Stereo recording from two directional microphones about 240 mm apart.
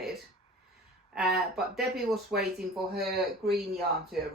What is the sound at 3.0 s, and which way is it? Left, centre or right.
Speech, right.